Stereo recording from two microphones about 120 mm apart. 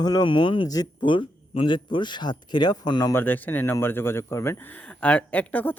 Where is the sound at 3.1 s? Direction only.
15° left (ahead or behind).